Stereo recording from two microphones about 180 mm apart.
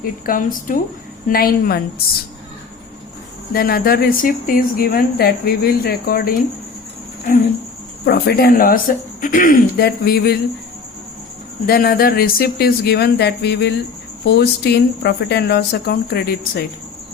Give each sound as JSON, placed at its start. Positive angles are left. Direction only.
{"t": 0.0, "sound": "a woman's voice", "side_deg": 50}
{"t": 3.5, "sound": "a woman's voice", "side_deg": 55}
{"t": 8.0, "sound": "a woman's voice", "side_deg": 60}
{"t": 11.6, "sound": "a woman's voice", "side_deg": 55}